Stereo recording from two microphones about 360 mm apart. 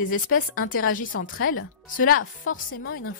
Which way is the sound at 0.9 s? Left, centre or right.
Left.